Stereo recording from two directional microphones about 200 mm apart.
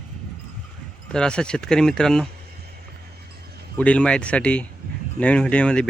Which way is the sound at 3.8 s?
5° left (ahead or behind).